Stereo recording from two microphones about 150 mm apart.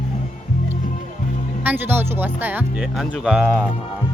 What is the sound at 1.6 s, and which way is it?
Speech, 15° right (ahead or behind).